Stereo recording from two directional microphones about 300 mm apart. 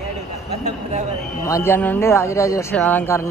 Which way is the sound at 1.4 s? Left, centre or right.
Centre.